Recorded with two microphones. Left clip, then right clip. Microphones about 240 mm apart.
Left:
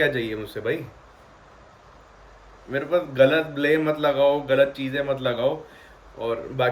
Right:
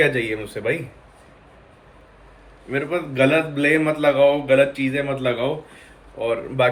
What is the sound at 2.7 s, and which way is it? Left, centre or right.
Speech, centre.